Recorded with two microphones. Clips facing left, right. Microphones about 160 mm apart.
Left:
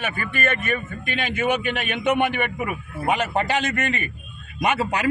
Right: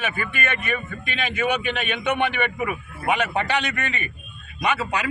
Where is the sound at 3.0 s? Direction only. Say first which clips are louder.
Left 1 dB; 40° left (ahead or behind).